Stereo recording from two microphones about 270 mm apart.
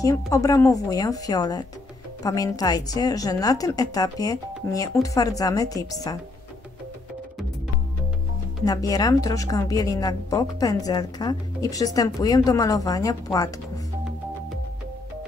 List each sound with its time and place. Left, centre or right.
0.0 s a woman's voice: centre
8.6 s a woman's voice: centre